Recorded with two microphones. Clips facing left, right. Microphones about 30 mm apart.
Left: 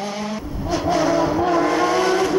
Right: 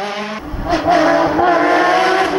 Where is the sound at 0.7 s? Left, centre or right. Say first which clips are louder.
Right 6 dB; right.